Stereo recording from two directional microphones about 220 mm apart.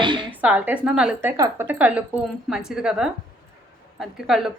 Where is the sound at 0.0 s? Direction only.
20° right (ahead or behind).